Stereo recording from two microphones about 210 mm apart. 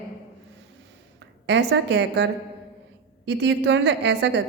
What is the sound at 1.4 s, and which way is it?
A woman's voice, 55° right (ahead or behind).